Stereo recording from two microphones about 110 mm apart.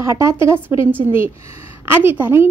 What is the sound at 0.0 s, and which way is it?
A woman's voice, 25° right (ahead or behind).